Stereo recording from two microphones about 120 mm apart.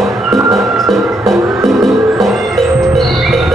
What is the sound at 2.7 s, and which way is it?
Music, 25° right (ahead or behind).